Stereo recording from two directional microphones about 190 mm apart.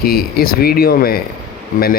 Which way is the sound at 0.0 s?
50° left (ahead or behind).